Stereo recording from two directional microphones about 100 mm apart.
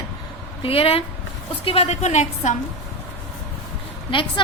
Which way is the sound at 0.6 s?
65° left (ahead or behind).